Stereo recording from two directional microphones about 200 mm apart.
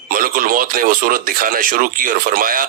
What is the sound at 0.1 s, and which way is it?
A man's voice, 45° right (ahead or behind).